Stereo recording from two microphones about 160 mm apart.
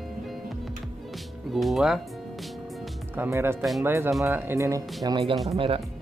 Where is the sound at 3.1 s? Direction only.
15° right (ahead or behind).